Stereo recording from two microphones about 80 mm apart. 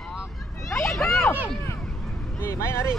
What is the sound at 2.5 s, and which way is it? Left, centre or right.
Speech, left.